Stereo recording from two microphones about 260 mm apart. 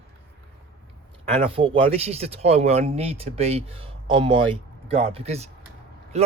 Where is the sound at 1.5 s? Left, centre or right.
Right.